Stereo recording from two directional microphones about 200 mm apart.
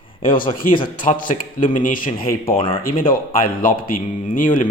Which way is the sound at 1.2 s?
40° left (ahead or behind).